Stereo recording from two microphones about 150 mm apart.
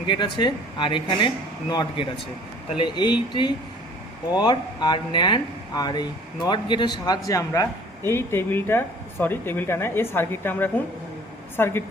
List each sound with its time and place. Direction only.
0.1 s speech: 30° left (ahead or behind); by 11.8 s 15° left (ahead or behind)